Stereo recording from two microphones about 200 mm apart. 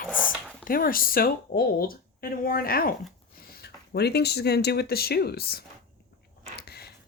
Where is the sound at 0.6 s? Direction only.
45° left (ahead or behind).